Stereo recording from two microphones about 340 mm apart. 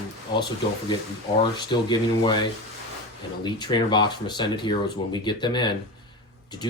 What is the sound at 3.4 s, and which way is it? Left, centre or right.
Speech, centre.